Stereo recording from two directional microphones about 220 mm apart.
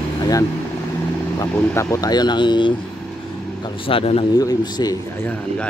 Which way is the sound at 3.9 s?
25° left (ahead or behind).